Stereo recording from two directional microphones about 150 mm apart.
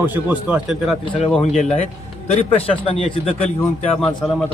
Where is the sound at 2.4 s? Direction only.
40° left (ahead or behind).